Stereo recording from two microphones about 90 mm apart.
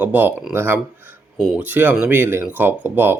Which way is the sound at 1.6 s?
20° right (ahead or behind).